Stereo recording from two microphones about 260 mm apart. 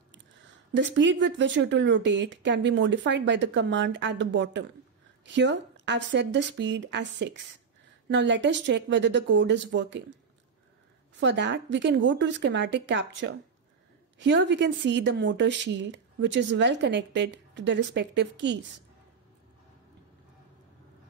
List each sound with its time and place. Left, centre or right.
0.7 s speech: right
11.1 s speech: right